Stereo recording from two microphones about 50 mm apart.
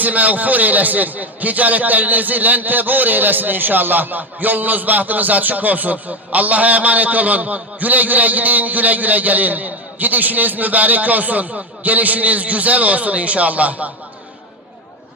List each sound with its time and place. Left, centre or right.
0.0 s a man's voice: right